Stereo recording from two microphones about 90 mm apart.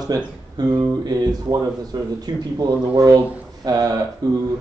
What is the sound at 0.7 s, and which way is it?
A man's voice, 35° right (ahead or behind).